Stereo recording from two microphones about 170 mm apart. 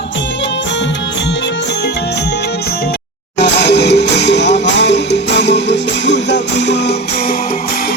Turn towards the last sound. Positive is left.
turn(degrees=90)